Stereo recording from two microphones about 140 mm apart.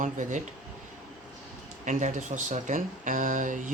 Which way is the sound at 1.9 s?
60° right (ahead or behind).